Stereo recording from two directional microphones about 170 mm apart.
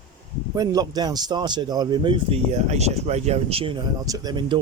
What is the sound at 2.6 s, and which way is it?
Speech, 40° right (ahead or behind).